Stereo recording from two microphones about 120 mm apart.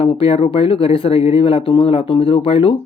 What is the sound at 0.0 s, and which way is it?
Speech, 50° left (ahead or behind).